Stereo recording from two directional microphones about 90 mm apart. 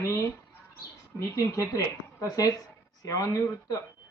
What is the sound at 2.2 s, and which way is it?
Speech, 45° left (ahead or behind).